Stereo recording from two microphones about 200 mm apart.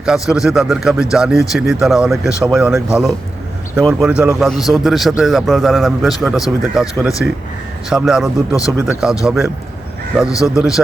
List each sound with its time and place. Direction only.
0.0 s a man's voice: centre (ahead or behind)